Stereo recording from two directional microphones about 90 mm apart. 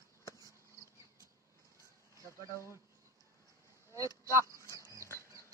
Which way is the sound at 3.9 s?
40° right (ahead or behind).